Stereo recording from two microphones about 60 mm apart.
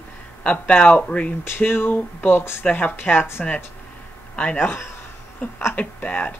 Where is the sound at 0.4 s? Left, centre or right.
Left.